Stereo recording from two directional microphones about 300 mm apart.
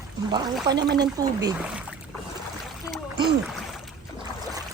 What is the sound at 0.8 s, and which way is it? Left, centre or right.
Speech, right.